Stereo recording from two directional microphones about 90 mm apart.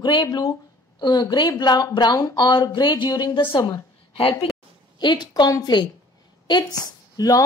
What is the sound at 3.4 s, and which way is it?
Speech, 70° left (ahead or behind).